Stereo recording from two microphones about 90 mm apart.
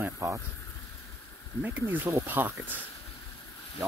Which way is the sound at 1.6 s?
20° right (ahead or behind).